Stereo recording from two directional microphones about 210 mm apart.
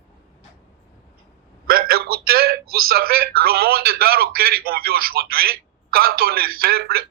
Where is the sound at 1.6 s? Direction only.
45° right (ahead or behind).